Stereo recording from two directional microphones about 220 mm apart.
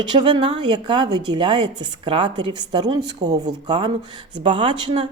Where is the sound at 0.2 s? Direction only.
20° right (ahead or behind).